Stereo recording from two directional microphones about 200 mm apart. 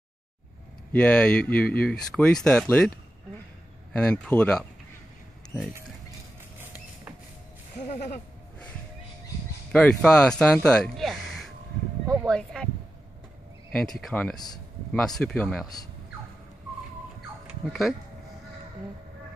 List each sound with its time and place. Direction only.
0.9 s speech: 5° left (ahead or behind)
3.9 s speech: 5° left (ahead or behind)
7.7 s a sound: 40° left (ahead or behind)
9.7 s speech: 5° left (ahead or behind)
13.7 s speech: 5° left (ahead or behind)
14.3 s a man's voice: 20° left (ahead or behind)
14.9 s speech: 5° left (ahead or behind)
17.6 s speech: centre (ahead or behind)